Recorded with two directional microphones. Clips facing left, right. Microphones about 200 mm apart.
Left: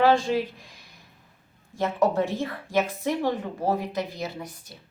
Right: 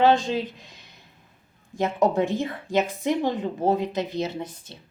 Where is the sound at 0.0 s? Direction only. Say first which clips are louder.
Right 1 dB; 20° right (ahead or behind).